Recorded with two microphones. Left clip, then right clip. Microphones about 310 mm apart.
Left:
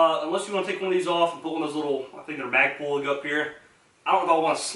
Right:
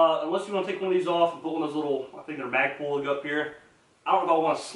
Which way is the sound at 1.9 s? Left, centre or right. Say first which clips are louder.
Left 1 dB; right.